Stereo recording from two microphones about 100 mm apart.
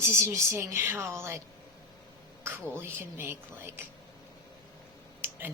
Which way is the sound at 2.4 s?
20° right (ahead or behind).